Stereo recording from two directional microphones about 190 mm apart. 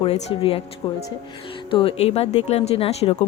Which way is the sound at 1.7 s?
30° left (ahead or behind).